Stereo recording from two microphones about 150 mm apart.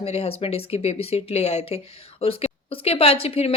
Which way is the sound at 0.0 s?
40° left (ahead or behind).